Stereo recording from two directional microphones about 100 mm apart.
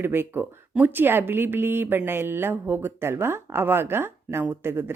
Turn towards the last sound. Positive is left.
turn(degrees=-25)  # may be behind; listen again after turning